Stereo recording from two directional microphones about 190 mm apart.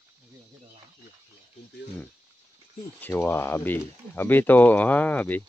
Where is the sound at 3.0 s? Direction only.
10° left (ahead or behind).